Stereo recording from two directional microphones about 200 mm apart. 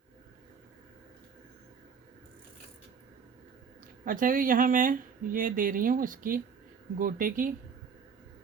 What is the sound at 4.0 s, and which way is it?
Speech, 45° right (ahead or behind).